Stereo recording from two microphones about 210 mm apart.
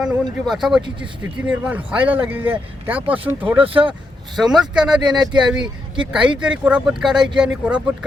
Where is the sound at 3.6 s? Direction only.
25° right (ahead or behind).